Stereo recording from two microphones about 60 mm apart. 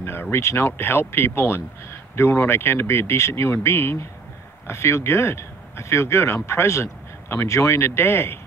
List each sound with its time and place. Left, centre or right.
0.0 s speech: left